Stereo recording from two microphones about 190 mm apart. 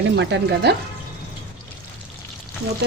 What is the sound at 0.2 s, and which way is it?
Speech, 65° right (ahead or behind).